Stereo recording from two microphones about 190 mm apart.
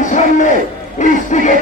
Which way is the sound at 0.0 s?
40° left (ahead or behind).